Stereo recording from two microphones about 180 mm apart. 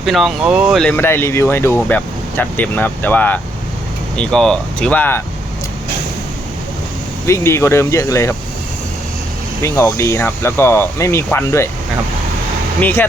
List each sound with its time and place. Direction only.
0.0 s speech: centre (ahead or behind)
7.3 s speech: 15° left (ahead or behind)
9.6 s speech: 15° left (ahead or behind)
12.8 s speech: 10° left (ahead or behind)